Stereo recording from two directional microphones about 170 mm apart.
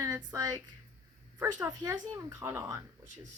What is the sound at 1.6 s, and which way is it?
Speech, 20° right (ahead or behind).